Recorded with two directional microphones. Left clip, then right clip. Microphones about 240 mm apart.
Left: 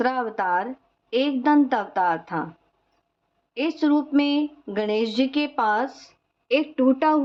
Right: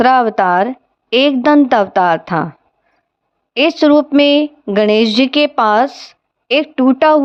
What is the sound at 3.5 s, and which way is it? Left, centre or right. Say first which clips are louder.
A woman's voice: right 12 dB; right.